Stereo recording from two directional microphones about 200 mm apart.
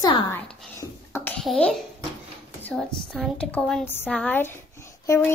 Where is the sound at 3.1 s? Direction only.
5° left (ahead or behind).